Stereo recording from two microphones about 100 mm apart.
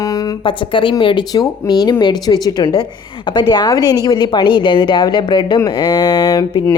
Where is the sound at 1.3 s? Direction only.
40° left (ahead or behind).